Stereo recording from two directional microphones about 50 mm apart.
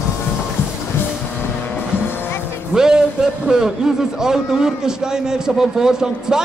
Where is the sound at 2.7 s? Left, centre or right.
Centre.